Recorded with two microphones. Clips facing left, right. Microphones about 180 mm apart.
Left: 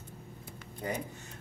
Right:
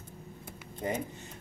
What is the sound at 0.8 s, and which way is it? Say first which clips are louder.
Speech: right 3 dB; 20° right (ahead or behind).